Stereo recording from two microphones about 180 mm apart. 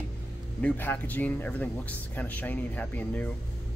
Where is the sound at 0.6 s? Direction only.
10° left (ahead or behind).